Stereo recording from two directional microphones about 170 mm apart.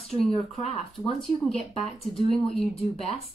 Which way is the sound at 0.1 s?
35° left (ahead or behind).